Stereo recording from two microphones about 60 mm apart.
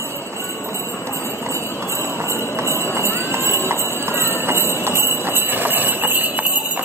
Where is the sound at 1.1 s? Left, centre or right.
Left.